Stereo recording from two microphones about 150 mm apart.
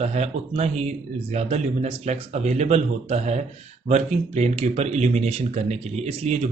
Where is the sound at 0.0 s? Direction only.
45° right (ahead or behind).